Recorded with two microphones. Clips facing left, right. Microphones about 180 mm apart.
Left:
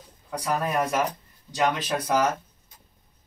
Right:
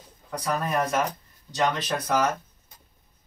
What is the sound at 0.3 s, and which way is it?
A man's voice, 10° left (ahead or behind).